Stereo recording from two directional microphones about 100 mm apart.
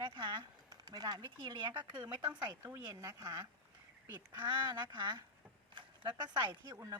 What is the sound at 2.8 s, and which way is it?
Speech, 40° right (ahead or behind).